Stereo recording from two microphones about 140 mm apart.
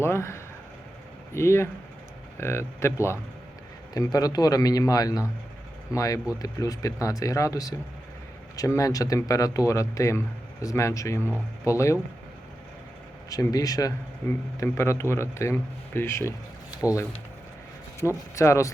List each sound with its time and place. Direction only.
0.0 s speech: 20° left (ahead or behind)
13.3 s speech: 25° left (ahead or behind)
18.0 s speech: centre (ahead or behind)
18.3 s speech: 20° left (ahead or behind)